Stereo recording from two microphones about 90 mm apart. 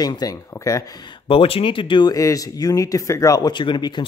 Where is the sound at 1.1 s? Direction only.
85° left.